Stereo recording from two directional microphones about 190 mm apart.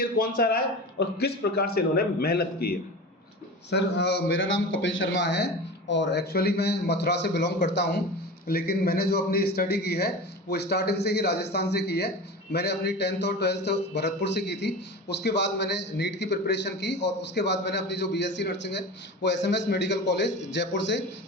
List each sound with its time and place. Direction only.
0.0 s a man's voice: 50° left (ahead or behind); by 8.0 s 65° left (ahead or behind)
8.4 s a man's voice: 55° left (ahead or behind); by 21.0 s 70° left (ahead or behind)